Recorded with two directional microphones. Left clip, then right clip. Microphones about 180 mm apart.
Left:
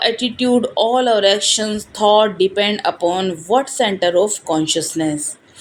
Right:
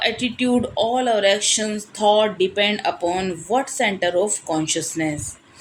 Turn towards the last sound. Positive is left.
turn(degrees=20)  # may be behind; listen again after turning